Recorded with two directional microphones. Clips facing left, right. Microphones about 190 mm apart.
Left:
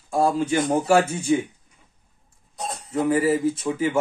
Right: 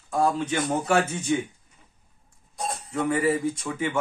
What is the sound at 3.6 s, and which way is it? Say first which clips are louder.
Speech: left 5 dB; 30° left (ahead or behind).